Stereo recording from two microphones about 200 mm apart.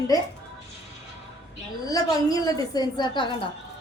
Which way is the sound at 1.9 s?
15° left (ahead or behind).